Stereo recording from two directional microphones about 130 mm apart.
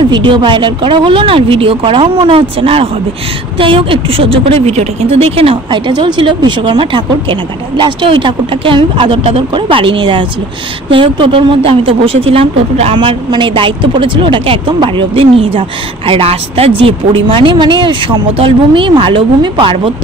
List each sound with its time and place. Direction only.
0.1 s speech: 40° right (ahead or behind)